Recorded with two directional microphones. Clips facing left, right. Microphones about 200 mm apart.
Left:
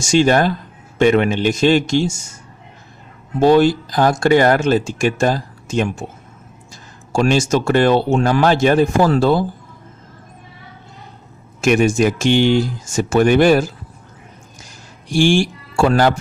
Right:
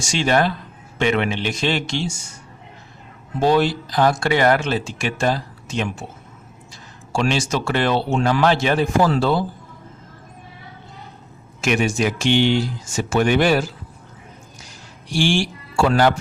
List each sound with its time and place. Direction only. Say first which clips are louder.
0.0 s speech: left 5 dB; 45° left (ahead or behind)
3.4 s speech: left 6 dB; 45° left (ahead or behind)
7.1 s speech: left 6 dB; 45° left (ahead or behind)
11.6 s speech: left 6 dB; 45° left (ahead or behind)
15.1 s speech: left 5 dB; 45° left (ahead or behind)